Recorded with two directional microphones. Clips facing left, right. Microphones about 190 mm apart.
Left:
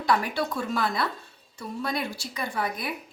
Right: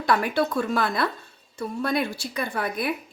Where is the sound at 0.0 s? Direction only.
55° right (ahead or behind).